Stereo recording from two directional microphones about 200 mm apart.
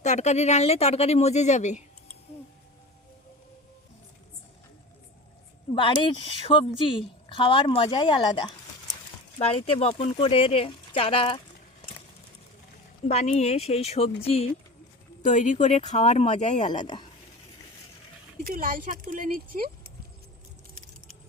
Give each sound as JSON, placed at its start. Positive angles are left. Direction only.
{"t": 0.0, "sound": "speech", "side_deg": 35}
{"t": 5.7, "sound": "speech", "side_deg": 25}
{"t": 13.1, "sound": "speech", "side_deg": 30}
{"t": 16.6, "sound": "speech", "side_deg": 20}
{"t": 18.4, "sound": "speech", "side_deg": -45}